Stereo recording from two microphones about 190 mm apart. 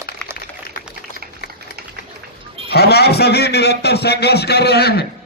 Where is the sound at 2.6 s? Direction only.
60° left (ahead or behind).